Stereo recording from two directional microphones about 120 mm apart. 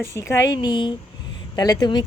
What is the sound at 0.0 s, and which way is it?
Speech, 25° left (ahead or behind).